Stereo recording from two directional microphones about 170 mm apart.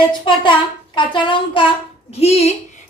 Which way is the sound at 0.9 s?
30° left (ahead or behind).